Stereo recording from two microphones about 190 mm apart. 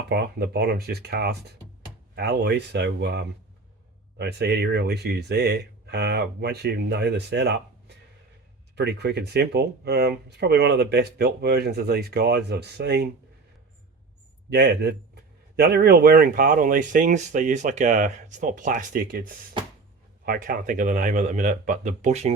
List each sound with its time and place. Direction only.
0.1 s speech: 55° right (ahead or behind)
14.5 s a man's voice: 60° right (ahead or behind); by 22.3 s 35° right (ahead or behind)